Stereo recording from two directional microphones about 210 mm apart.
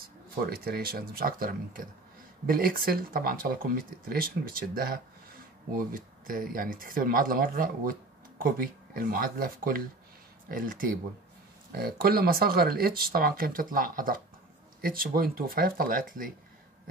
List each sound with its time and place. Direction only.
0.5 s speech: 45° right (ahead or behind)